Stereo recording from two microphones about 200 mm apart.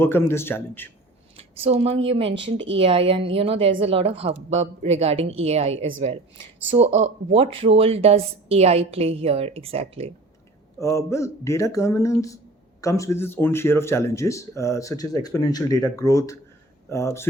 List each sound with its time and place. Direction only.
0.0 s speech: 10° left (ahead or behind)
1.4 s a woman's voice: 30° right (ahead or behind)
2.3 s speech: 65° right (ahead or behind)
2.7 s a woman's voice: 30° right (ahead or behind)
10.8 s speech: 15° left (ahead or behind)